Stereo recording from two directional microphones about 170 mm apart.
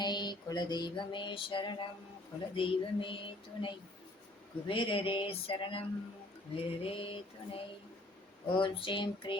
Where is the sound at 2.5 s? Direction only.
30° left (ahead or behind).